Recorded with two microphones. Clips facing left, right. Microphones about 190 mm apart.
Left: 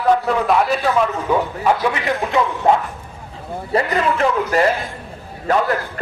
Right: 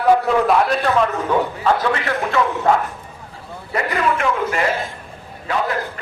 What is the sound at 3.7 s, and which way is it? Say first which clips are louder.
A man's voice: left 2 dB; 35° left (ahead or behind).